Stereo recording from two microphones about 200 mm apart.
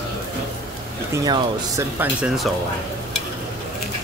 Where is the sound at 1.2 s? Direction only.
15° right (ahead or behind).